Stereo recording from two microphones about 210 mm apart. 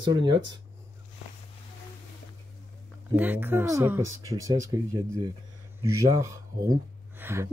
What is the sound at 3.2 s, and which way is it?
Speech, 10° right (ahead or behind).